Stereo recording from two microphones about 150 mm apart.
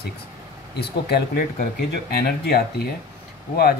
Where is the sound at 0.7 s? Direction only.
90° left.